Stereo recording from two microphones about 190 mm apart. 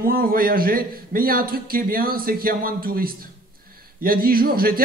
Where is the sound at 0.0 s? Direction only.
50° right (ahead or behind).